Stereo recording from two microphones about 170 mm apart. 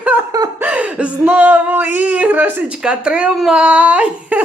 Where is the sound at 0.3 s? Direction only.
20° right (ahead or behind).